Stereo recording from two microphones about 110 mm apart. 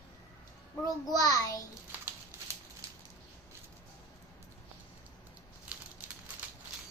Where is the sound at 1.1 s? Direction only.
35° left (ahead or behind).